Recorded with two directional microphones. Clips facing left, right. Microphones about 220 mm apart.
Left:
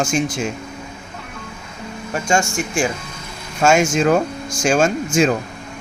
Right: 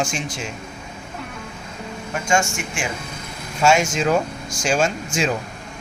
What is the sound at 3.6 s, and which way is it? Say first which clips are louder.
Speech: left 3 dB; 50° left (ahead or behind).